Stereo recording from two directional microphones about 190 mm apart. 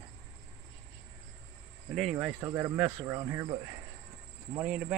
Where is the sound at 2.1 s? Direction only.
15° right (ahead or behind).